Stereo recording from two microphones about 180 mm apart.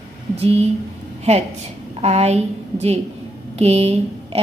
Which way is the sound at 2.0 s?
35° right (ahead or behind).